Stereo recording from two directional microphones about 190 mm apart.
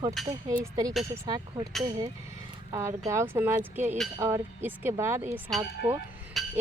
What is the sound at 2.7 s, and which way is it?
Speech, 15° right (ahead or behind).